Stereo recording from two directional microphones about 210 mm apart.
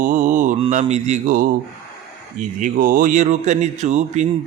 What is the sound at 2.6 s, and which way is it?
Speech, 40° right (ahead or behind).